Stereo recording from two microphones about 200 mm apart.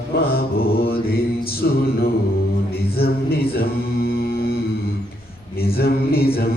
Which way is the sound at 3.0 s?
50° left (ahead or behind).